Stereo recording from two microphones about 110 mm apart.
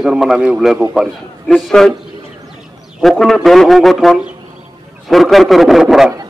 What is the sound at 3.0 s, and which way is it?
A man's voice, centre (ahead or behind).